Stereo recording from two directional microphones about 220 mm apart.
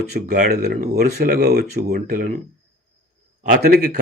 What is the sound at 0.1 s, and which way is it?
Speech, 45° right (ahead or behind).